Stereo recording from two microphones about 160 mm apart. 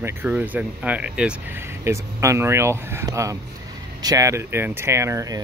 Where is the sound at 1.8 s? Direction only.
20° right (ahead or behind).